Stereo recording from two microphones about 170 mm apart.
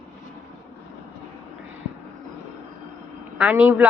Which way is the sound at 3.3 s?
5° right (ahead or behind).